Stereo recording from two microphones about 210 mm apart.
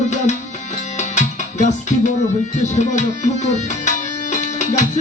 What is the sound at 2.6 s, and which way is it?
Tabla, 35° left (ahead or behind).